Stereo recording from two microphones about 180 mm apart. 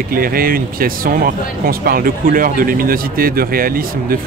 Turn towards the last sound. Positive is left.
turn(degrees=-55)  # may be behind; listen again after turning